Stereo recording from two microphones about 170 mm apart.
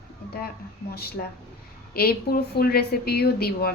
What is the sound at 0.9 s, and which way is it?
A woman's voice, 65° left (ahead or behind).